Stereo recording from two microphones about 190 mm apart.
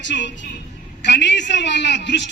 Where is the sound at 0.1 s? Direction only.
60° left (ahead or behind).